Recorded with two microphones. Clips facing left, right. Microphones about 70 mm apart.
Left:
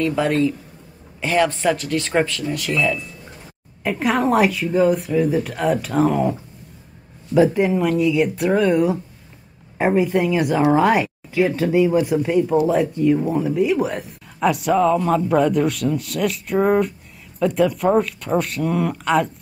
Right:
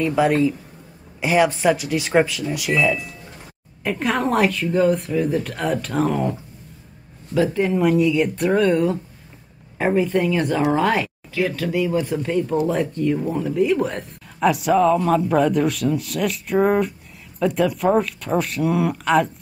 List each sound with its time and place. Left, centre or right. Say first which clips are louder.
0.0 s speech: right 1 dB; centre
7.3 s speech: left 4 dB; centre
7.7 s speech: right 1 dB; centre